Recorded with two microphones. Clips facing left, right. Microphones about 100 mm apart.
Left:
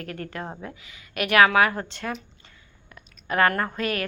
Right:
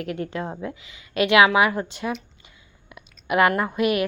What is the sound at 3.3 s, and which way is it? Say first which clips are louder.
Speech: right 3 dB; 15° right (ahead or behind).